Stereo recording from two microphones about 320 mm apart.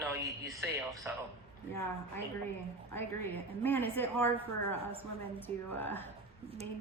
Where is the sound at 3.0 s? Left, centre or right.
Centre.